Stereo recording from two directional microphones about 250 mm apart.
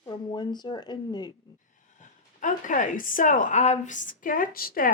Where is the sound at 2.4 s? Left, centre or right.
Left.